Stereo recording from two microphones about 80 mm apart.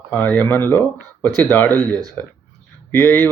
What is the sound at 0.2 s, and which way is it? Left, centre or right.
Speech, left.